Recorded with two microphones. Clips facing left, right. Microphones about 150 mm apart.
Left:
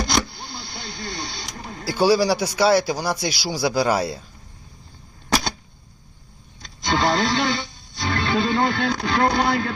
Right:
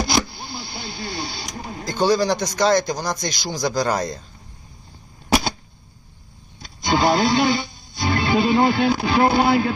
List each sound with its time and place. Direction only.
0.0 s a sound: 5° right (ahead or behind)
1.8 s speech: 10° left (ahead or behind)
6.6 s speech: 10° right (ahead or behind)